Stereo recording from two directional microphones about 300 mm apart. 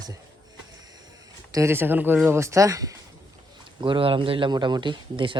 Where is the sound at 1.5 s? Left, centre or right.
Centre.